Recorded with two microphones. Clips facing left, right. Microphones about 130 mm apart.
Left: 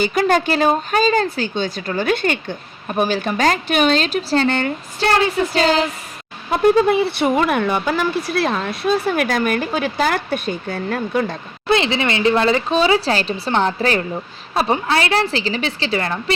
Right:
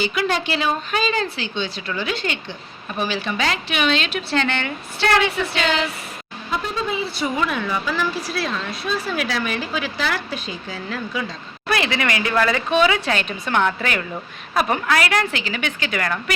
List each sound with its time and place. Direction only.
0.0 s speech: 45° left (ahead or behind)
6.5 s speech: 55° left (ahead or behind)
11.7 s speech: 25° left (ahead or behind)